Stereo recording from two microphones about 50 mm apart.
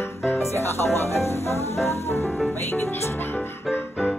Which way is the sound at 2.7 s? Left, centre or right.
Left.